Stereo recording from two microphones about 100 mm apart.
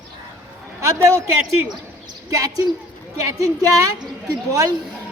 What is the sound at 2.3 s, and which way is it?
A woman's voice, 35° right (ahead or behind).